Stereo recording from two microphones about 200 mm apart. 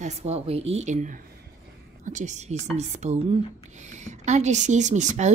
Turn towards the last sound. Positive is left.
turn(degrees=-35)  # may be behind; listen again after turning